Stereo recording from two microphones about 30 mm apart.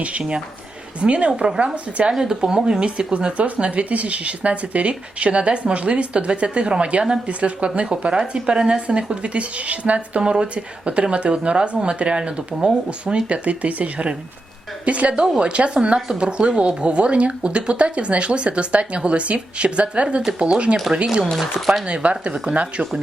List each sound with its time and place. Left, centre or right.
0.0 s speech: right
2.1 s speech: centre
2.4 s speech: right
2.8 s speech: right
10.2 s speech: right
10.5 s speech: right
12.5 s speech: right
13.2 s speech: right
21.8 s speech: right
22.5 s speech: right